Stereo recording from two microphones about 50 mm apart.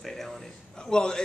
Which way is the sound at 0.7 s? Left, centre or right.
Centre.